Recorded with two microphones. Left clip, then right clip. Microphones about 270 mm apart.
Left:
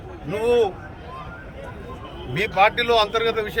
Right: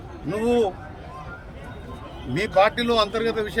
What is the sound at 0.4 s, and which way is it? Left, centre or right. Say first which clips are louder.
Speech: left 3 dB; centre.